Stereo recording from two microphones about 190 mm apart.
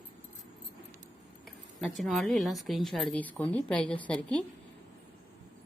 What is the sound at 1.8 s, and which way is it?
A woman's voice, centre (ahead or behind).